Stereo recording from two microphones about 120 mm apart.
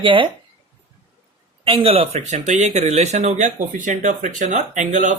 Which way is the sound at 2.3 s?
75° right (ahead or behind).